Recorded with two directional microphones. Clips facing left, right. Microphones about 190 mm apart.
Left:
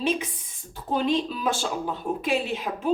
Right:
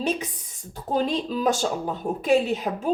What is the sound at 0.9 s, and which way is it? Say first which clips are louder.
A woman's voice: even; 40° right (ahead or behind).